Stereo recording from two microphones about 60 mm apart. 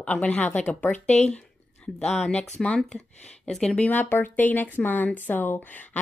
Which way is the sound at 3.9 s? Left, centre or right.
Left.